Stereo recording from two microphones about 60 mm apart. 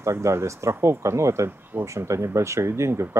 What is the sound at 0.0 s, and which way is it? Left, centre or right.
Speech, right.